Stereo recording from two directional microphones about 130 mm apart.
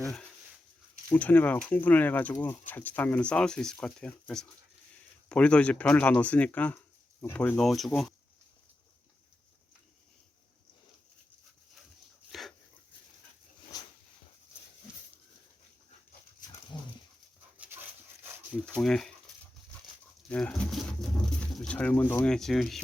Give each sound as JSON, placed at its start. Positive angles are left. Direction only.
{"t": 1.1, "sound": "speech", "side_deg": 10}
{"t": 12.3, "sound": "dog", "side_deg": 0}
{"t": 13.7, "sound": "dog", "side_deg": 30}
{"t": 16.4, "sound": "dog", "side_deg": 90}
{"t": 17.6, "sound": "dog", "side_deg": -15}
{"t": 18.8, "sound": "speech", "side_deg": 5}
{"t": 20.2, "sound": "pigeon", "side_deg": 10}
{"t": 22.1, "sound": "speech", "side_deg": 5}